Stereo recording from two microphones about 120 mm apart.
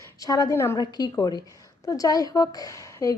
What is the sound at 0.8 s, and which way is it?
A woman's voice, 35° left (ahead or behind).